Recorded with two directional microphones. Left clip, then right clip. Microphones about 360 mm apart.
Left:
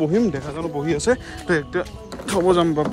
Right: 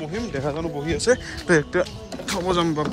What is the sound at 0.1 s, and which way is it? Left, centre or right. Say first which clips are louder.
Speech: left 5 dB; centre.